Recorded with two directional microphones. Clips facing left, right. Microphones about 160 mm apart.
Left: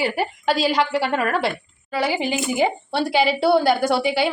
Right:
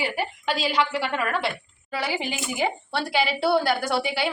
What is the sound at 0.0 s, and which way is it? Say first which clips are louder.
A woman's voice: left 5 dB; 40° left (ahead or behind).